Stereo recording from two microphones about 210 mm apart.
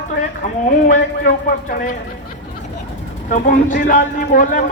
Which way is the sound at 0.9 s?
40° left (ahead or behind).